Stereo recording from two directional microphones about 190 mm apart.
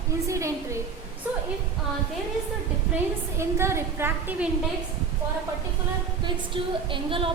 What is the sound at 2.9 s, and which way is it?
A woman's voice, 15° right (ahead or behind).